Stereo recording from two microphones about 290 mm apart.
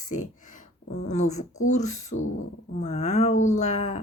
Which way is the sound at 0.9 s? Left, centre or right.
Left.